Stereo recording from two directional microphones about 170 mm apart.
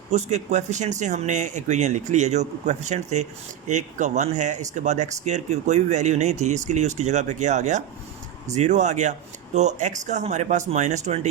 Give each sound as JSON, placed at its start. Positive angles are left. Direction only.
{"t": 0.1, "sound": "speech", "side_deg": -40}